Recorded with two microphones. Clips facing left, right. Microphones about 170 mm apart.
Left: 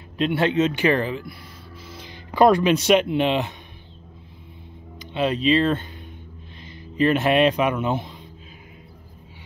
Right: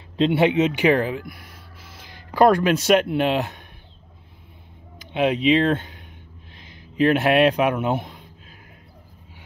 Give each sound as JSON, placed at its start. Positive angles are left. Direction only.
{"t": 0.2, "sound": "speech", "side_deg": -25}
{"t": 0.5, "sound": "speech", "side_deg": -15}
{"t": 5.1, "sound": "speech", "side_deg": -15}
{"t": 7.0, "sound": "speech", "side_deg": -10}